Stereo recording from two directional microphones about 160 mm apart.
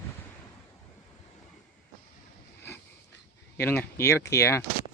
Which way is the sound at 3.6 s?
15° left (ahead or behind).